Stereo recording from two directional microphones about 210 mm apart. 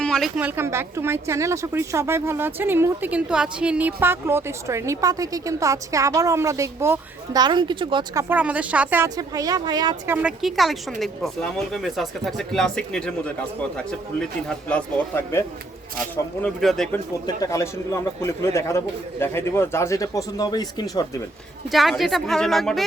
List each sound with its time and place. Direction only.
0.0 s speech: centre (ahead or behind); by 10.2 s 20° right (ahead or behind)
10.2 s speech: 5° right (ahead or behind)
17.2 s speech: 15° left (ahead or behind)
21.7 s speech: centre (ahead or behind)